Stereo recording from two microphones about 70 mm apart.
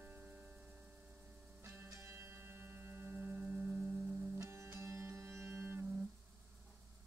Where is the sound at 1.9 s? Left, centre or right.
Right.